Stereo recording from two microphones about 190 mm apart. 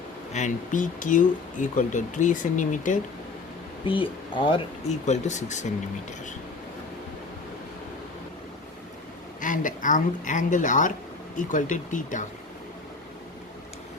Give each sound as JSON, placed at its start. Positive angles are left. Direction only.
{"t": 0.3, "sound": "speech", "side_deg": 40}
{"t": 3.8, "sound": "speech", "side_deg": 25}
{"t": 5.0, "sound": "speech", "side_deg": 40}
{"t": 9.4, "sound": "speech", "side_deg": 45}